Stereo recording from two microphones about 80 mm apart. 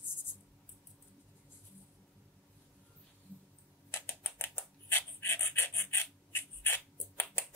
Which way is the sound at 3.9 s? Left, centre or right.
Left.